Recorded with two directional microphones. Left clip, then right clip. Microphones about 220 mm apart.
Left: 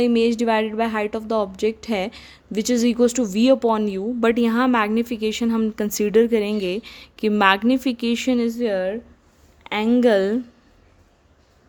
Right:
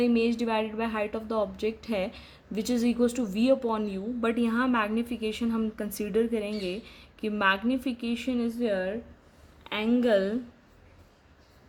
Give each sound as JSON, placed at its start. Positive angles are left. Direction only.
{"t": 0.0, "sound": "a woman's voice", "side_deg": 40}